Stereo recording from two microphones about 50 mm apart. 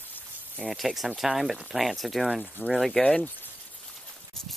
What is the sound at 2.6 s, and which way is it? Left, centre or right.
Speech, left.